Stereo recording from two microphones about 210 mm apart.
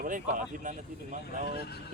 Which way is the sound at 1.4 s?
50° left (ahead or behind).